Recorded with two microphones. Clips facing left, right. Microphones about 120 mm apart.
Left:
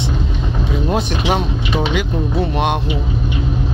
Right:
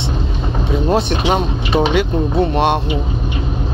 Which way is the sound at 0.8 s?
25° right (ahead or behind).